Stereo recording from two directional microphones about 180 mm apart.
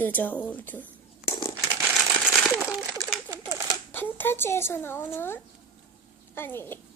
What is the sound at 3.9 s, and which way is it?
A child's voice, 10° left (ahead or behind).